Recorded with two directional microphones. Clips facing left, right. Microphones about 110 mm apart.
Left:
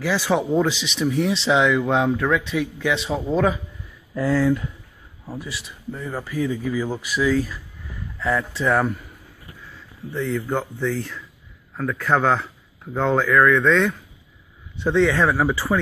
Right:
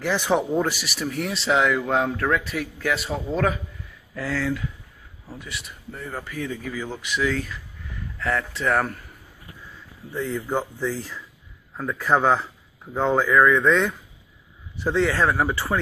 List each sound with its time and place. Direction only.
0.1 s a man's voice: 15° right (ahead or behind); by 3.5 s centre (ahead or behind)
4.1 s speech: 15° left (ahead or behind)
5.6 s a man's voice: centre (ahead or behind)
10.1 s a man's voice: 10° right (ahead or behind)